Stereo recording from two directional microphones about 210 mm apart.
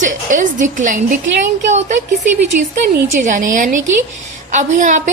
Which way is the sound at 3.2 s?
35° right (ahead or behind).